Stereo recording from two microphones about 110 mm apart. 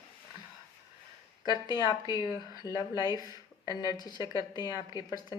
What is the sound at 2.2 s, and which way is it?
Speech, 35° right (ahead or behind).